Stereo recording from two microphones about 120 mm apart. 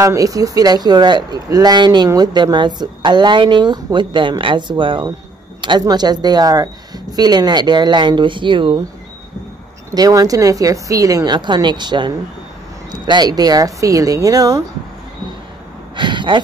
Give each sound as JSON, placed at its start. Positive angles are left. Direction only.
{"t": 0.0, "sound": "speech", "side_deg": -25}
{"t": 9.8, "sound": "speech", "side_deg": -30}
{"t": 16.0, "sound": "speech", "side_deg": -40}